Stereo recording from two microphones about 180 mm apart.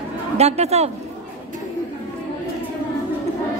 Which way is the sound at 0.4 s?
35° right (ahead or behind).